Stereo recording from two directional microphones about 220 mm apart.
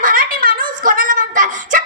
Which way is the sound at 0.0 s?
40° right (ahead or behind).